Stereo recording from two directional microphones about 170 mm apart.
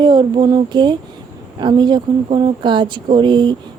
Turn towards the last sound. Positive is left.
turn(degrees=-25)  # may be behind; listen again after turning